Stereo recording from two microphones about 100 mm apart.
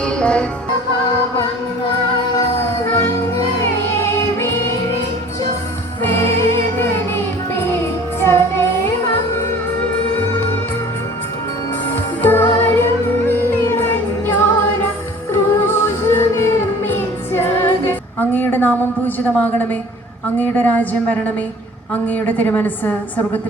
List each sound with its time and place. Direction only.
0.0 s music: 10° left (ahead or behind)
2.9 s music: 25° left (ahead or behind)
6.7 s music: 20° left (ahead or behind)
8.3 s child singing: 25° left (ahead or behind)
9.9 s music: 15° left (ahead or behind)
12.2 s music: 20° left (ahead or behind)
19.3 s a woman's voice: 10° left (ahead or behind)